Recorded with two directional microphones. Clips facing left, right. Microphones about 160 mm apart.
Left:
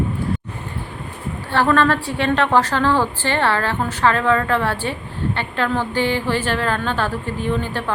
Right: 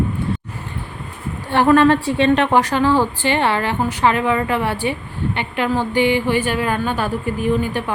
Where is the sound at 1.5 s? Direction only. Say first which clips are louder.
Right 4 dB; 15° right (ahead or behind).